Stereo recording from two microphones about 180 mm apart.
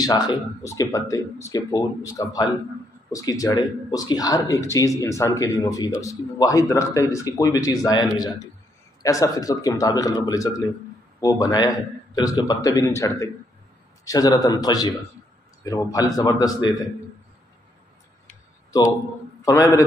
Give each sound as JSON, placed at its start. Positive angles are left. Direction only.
{"t": 0.0, "sound": "speech", "side_deg": 25}
{"t": 19.4, "sound": "a man's voice", "side_deg": 15}